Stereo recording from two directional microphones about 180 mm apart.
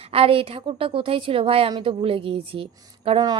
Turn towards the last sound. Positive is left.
turn(degrees=-25)  # may be behind; listen again after turning